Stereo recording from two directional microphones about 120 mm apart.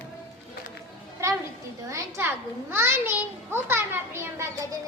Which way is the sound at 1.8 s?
25° right (ahead or behind).